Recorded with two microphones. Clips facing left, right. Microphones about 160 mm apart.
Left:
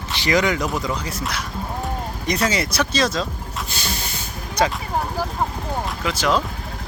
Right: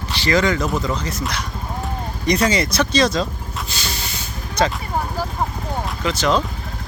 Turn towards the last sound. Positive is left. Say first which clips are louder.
# right 2 dB
turn(degrees=10)  # may be behind; listen again after turning